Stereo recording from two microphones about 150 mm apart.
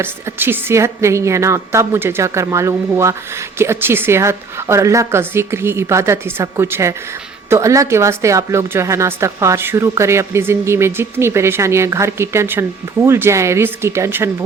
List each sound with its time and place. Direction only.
0.0 s a woman's voice: 15° right (ahead or behind)